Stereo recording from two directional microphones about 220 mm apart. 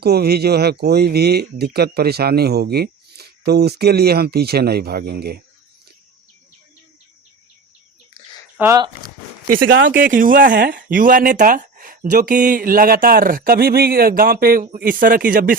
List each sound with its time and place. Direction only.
0.0 s speech: 45° right (ahead or behind)
8.5 s speech: 15° right (ahead or behind)
9.6 s speech: 60° right (ahead or behind)
9.9 s speech: 40° right (ahead or behind)